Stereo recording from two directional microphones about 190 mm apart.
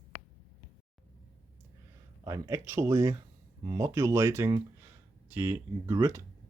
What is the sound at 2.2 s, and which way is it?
Speech, 15° right (ahead or behind).